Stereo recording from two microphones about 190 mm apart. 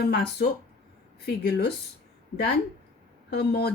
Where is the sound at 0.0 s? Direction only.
55° left (ahead or behind).